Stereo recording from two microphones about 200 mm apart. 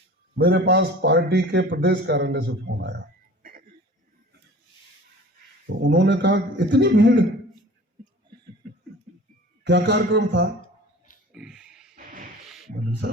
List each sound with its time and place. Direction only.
0.3 s a man's voice: 55° right (ahead or behind)
5.6 s a man's voice: 60° right (ahead or behind)
9.6 s a man's voice: 60° right (ahead or behind)
11.3 s music: 5° right (ahead or behind)